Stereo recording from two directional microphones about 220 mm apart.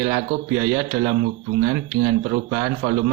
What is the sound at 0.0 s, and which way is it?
Speech, 30° right (ahead or behind).